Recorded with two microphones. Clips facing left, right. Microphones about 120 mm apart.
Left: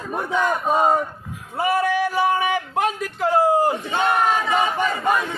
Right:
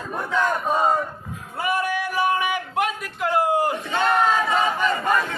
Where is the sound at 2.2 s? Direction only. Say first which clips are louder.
Left 2 dB; 30° left (ahead or behind).